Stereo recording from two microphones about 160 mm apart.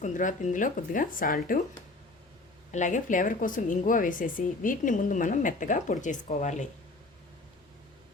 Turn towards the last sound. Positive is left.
turn(degrees=50)  # may be behind; listen again after turning